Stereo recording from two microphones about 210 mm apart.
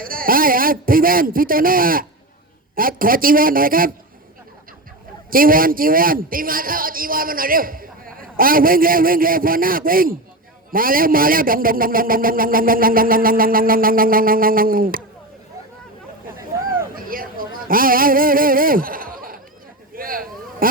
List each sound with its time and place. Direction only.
0.0 s a man's voice: 45° right (ahead or behind)
5.3 s a man's voice: 40° right (ahead or behind)
16.9 s a sound: 40° right (ahead or behind)